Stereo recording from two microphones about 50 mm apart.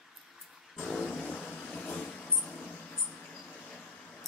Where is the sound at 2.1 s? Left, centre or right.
Left.